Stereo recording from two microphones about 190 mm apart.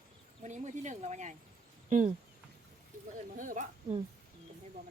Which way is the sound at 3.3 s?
45° right (ahead or behind).